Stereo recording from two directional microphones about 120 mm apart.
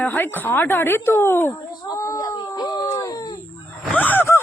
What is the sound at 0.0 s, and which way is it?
Speech, 15° left (ahead or behind).